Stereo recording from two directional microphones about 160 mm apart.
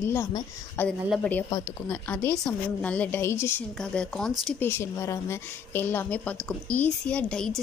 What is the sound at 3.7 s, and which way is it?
A woman's voice, 5° left (ahead or behind).